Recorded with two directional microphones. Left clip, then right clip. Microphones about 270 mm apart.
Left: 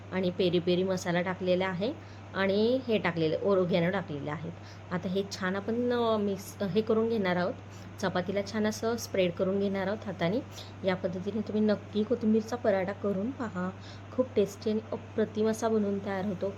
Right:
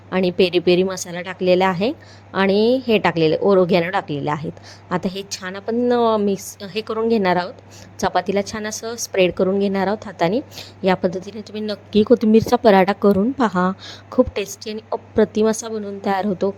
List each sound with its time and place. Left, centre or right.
0.1 s a woman's voice: right